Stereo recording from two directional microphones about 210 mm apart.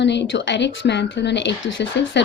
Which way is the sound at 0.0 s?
55° left (ahead or behind).